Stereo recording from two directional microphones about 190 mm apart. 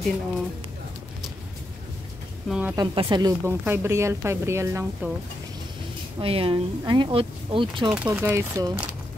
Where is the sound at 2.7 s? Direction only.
25° right (ahead or behind).